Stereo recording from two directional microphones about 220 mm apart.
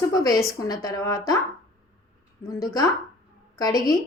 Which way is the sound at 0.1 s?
15° left (ahead or behind).